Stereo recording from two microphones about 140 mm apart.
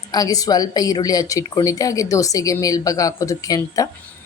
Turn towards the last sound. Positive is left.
turn(degrees=25)  # may be behind; listen again after turning